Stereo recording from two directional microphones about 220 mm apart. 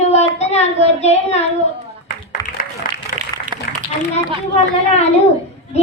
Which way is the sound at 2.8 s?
40° left (ahead or behind).